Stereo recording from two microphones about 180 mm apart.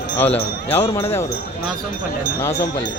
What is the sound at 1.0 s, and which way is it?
Speech, 15° left (ahead or behind).